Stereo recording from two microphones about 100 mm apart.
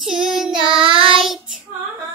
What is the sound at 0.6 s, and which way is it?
Child singing, 60° right (ahead or behind).